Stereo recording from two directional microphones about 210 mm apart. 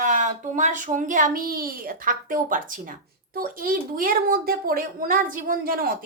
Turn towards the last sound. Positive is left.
turn(degrees=-45)  # may be behind; listen again after turning